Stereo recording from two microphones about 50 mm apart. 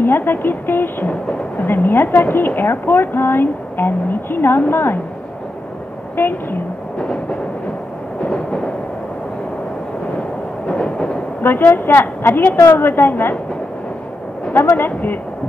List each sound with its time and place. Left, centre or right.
0.0 s a woman's voice: left
6.1 s a woman's voice: left
7.0 s a sound: left
10.7 s a sound: centre
11.4 s a woman's voice: left
14.5 s speech: left
14.9 s speech: left